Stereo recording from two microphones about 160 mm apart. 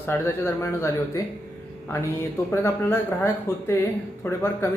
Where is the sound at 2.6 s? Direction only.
15° left (ahead or behind).